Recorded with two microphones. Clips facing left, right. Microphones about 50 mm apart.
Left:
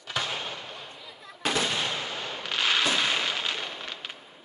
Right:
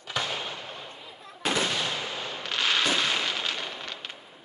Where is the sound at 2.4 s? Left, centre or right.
Centre.